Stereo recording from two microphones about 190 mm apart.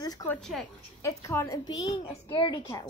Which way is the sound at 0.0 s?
20° left (ahead or behind).